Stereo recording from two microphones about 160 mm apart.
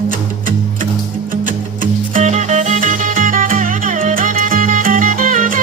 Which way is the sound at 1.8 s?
50° right (ahead or behind).